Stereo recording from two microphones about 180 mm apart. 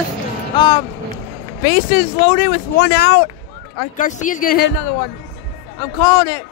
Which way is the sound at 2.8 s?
65° left (ahead or behind).